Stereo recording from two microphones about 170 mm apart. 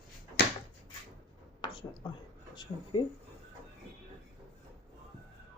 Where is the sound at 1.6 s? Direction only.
25° left (ahead or behind).